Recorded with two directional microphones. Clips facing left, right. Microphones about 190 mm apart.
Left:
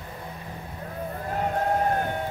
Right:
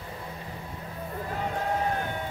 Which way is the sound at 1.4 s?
50° left (ahead or behind).